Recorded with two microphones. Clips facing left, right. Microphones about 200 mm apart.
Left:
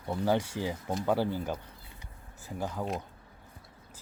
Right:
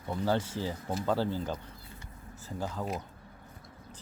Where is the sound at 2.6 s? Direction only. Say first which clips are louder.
Left 1 dB; 10° left (ahead or behind).